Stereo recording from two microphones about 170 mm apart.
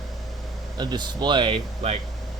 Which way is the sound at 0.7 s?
25° right (ahead or behind).